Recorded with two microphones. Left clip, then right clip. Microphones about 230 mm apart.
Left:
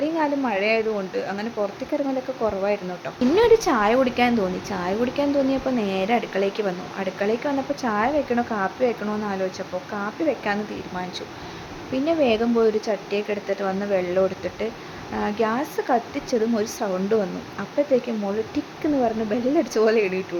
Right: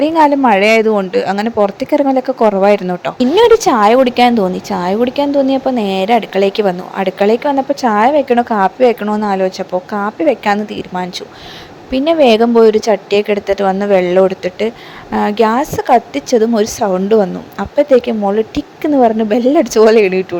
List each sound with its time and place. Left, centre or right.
0.0 s a woman's voice: right